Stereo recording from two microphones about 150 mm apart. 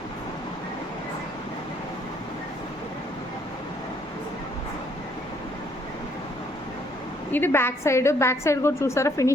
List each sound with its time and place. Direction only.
7.3 s a woman's voice: 15° left (ahead or behind)